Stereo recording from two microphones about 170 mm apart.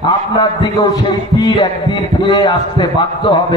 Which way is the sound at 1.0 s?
25° left (ahead or behind).